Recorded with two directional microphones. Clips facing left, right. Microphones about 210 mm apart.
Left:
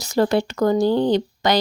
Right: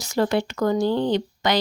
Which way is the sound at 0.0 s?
35° left (ahead or behind).